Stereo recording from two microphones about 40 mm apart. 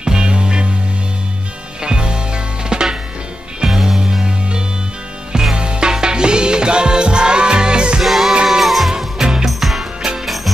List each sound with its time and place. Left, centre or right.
0.0 s music: right
1.8 s music: right
5.3 s music: centre
8.0 s music: centre
8.9 s music: centre
9.5 s music: centre